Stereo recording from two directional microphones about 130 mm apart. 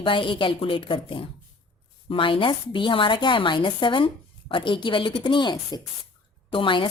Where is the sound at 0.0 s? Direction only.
40° left (ahead or behind).